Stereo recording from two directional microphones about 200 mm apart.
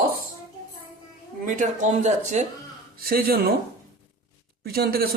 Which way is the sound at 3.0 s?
50° right (ahead or behind).